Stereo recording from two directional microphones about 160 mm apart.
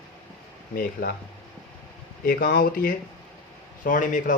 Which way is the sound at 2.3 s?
65° left (ahead or behind).